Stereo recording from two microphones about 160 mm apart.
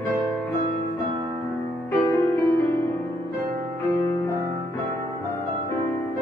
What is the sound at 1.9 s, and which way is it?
Music, 15° left (ahead or behind).